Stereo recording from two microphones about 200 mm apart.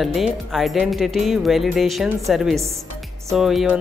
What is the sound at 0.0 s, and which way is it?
Speech, centre (ahead or behind).